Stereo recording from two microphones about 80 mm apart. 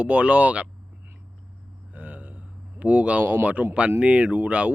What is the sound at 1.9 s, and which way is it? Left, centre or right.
Speech, right.